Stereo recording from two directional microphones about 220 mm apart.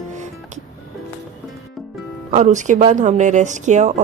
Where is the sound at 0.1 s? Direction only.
35° right (ahead or behind).